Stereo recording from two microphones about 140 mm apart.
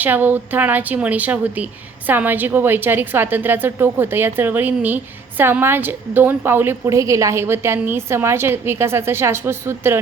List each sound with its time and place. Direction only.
0.0 s a woman's voice: 15° right (ahead or behind)